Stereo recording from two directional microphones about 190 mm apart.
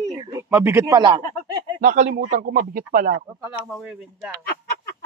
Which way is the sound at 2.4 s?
55° right (ahead or behind).